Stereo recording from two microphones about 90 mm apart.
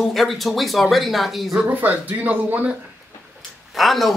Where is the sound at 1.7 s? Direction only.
20° right (ahead or behind).